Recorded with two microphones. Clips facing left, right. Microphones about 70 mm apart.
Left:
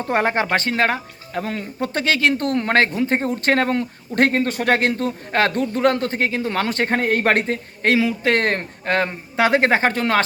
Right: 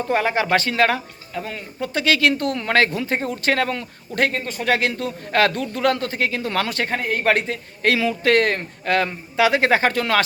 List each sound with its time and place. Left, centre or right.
0.1 s speech: left
1.3 s speech: left
2.0 s speech: left
4.4 s speech: left